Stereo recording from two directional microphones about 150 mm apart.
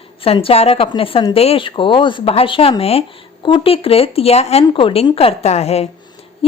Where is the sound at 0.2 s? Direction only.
40° left (ahead or behind).